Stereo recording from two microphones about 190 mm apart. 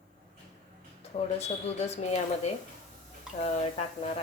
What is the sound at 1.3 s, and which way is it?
Speech, 35° left (ahead or behind).